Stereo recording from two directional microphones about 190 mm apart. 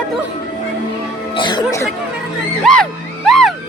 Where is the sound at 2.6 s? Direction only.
5° left (ahead or behind).